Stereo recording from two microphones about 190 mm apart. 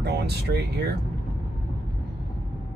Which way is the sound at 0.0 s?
60° right (ahead or behind).